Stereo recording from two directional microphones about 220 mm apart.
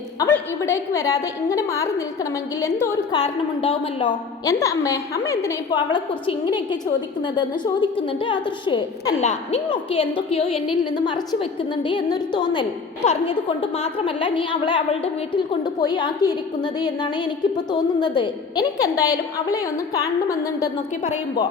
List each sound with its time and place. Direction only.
0.2 s a woman's voice: 10° left (ahead or behind)
3.1 s a woman's voice: 25° left (ahead or behind)
17.7 s a woman's voice: 20° left (ahead or behind)